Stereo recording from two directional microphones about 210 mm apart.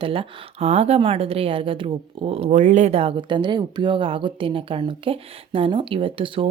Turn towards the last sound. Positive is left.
turn(degrees=-25)  # may be behind; listen again after turning